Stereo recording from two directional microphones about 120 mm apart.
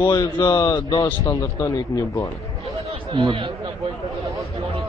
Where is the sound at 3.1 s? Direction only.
45° right (ahead or behind).